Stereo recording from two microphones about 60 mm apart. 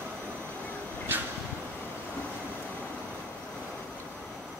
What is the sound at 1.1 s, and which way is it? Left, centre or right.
Vehicle, right.